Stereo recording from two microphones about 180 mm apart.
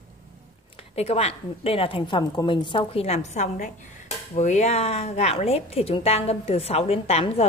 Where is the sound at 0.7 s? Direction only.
30° left (ahead or behind).